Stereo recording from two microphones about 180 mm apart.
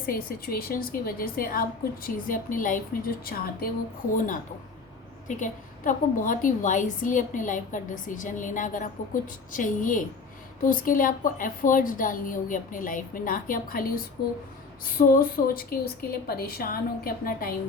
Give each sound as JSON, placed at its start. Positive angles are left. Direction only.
{"t": 0.0, "sound": "a woman's voice", "side_deg": 55}
{"t": 5.3, "sound": "a woman's voice", "side_deg": 45}